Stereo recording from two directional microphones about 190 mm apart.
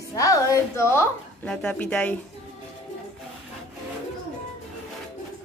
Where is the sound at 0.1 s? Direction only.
20° left (ahead or behind).